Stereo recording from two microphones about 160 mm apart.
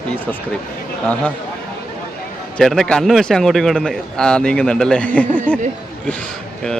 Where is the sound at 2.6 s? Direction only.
Centre (ahead or behind).